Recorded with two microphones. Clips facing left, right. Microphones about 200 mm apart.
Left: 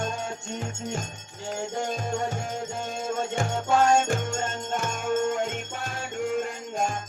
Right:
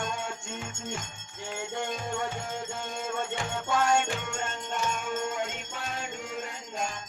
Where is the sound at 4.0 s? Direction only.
45° left (ahead or behind).